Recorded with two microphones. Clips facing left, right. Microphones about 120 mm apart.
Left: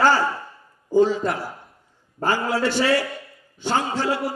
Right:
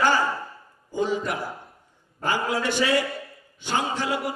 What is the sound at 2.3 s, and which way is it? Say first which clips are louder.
Speech: left 3 dB; 15° right (ahead or behind).